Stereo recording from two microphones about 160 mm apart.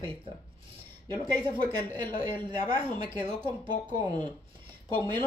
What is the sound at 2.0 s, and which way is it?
Speech, 30° right (ahead or behind).